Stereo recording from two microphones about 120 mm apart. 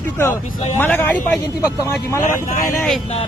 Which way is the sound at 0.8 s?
15° left (ahead or behind).